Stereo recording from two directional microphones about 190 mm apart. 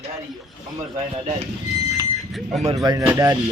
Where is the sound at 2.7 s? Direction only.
20° right (ahead or behind).